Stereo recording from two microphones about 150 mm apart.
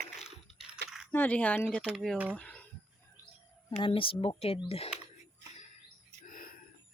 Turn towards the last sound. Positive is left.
turn(degrees=65)  # may be behind; listen again after turning